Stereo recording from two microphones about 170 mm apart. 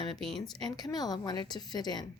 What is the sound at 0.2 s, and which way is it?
Speech, centre (ahead or behind).